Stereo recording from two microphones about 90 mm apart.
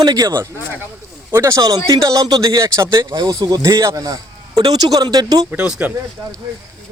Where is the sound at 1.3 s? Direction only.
30° right (ahead or behind).